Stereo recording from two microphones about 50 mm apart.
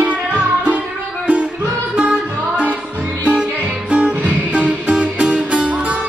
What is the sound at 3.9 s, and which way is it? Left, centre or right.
Music, right.